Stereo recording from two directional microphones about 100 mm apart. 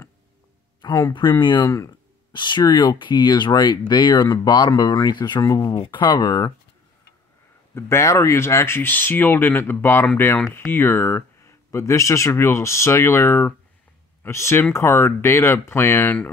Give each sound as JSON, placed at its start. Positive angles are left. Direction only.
{"t": 0.8, "sound": "speech", "side_deg": 35}
{"t": 1.4, "sound": "speech", "side_deg": 50}
{"t": 7.7, "sound": "speech", "side_deg": 30}